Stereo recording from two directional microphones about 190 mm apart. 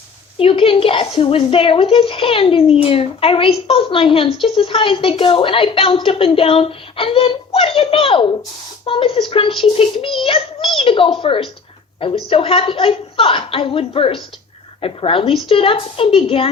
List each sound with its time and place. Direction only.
0.3 s speech: 30° left (ahead or behind)